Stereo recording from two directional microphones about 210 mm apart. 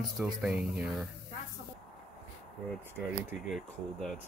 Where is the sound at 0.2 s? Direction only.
5° right (ahead or behind).